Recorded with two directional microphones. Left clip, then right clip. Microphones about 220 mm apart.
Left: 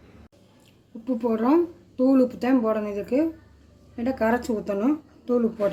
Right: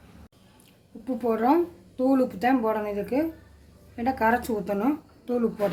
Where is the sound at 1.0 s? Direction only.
Centre (ahead or behind).